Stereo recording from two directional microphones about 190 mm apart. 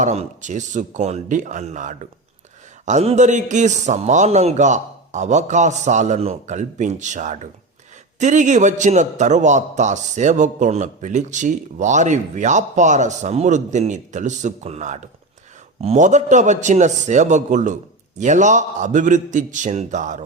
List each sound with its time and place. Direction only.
0.0 s a man's voice: 40° right (ahead or behind)